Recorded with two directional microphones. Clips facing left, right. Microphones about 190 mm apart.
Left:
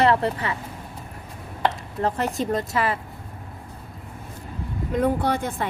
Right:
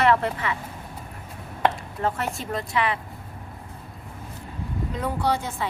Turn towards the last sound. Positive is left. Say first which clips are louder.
# left 1 dB
turn(degrees=55)  # may be behind; listen again after turning